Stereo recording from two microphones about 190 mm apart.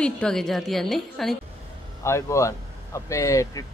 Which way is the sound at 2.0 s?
15° left (ahead or behind).